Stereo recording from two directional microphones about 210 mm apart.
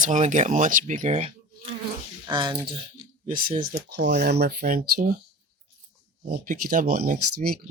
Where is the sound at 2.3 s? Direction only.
20° right (ahead or behind).